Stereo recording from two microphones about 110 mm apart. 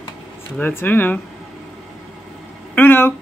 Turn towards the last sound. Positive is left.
turn(degrees=20)  # may be behind; listen again after turning